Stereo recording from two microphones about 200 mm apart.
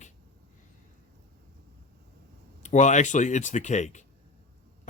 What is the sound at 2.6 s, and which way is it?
Speech, 35° left (ahead or behind).